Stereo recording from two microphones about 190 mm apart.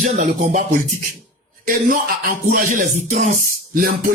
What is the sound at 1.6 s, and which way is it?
A man's voice, 45° right (ahead or behind).